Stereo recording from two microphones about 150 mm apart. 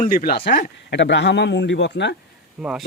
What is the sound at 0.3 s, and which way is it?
Speech, 90° left.